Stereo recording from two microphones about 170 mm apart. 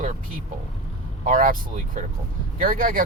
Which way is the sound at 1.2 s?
55° right (ahead or behind).